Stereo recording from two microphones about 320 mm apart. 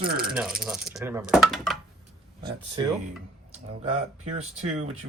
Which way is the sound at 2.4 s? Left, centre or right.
Centre.